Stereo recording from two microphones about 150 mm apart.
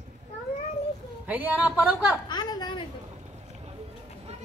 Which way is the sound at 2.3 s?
25° left (ahead or behind).